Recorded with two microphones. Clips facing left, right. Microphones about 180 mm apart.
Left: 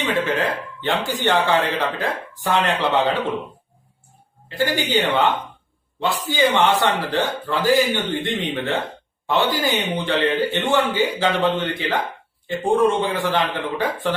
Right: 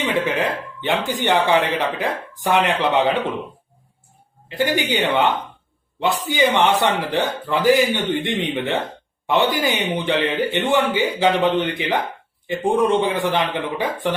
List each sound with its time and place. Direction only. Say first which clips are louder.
0.3 s a man's voice: even; 15° right (ahead or behind)
4.4 s a man's voice: right 2 dB; 15° right (ahead or behind)